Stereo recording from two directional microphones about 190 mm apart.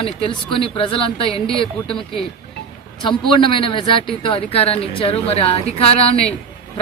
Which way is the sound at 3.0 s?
25° left (ahead or behind).